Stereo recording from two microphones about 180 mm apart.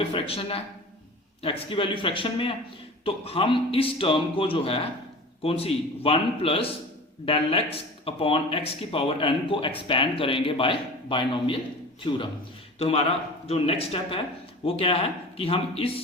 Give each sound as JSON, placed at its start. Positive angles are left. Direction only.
{"t": 0.1, "sound": "a man's voice", "side_deg": 30}